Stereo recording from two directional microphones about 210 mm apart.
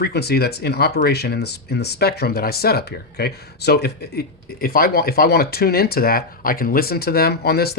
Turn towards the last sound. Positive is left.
turn(degrees=50)  # may be behind; listen again after turning